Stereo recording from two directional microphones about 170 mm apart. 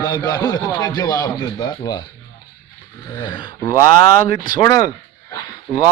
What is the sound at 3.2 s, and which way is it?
Speech, 25° left (ahead or behind).